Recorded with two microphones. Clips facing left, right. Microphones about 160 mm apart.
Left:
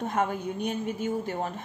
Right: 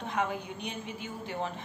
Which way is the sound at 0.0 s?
45° left (ahead or behind).